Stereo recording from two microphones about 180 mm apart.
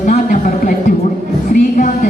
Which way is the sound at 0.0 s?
45° left (ahead or behind).